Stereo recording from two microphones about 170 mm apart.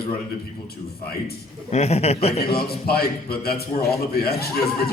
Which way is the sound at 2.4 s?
65° left (ahead or behind).